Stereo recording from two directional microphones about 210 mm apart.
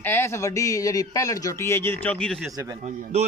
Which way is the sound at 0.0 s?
10° left (ahead or behind).